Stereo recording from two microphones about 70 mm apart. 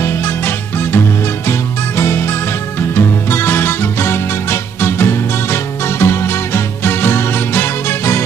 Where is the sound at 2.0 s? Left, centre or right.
Left.